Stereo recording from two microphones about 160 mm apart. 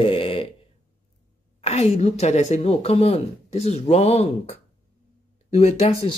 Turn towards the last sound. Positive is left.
turn(degrees=40)  # may be behind; listen again after turning